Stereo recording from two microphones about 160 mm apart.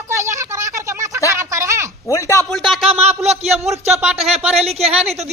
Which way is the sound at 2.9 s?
40° right (ahead or behind).